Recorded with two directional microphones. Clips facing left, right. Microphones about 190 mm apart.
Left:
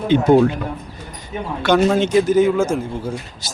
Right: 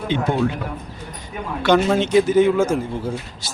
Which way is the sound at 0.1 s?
40° left (ahead or behind).